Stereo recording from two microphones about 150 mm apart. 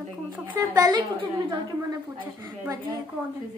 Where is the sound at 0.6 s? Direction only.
25° right (ahead or behind).